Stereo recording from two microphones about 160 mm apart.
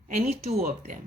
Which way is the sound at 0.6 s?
65° right (ahead or behind).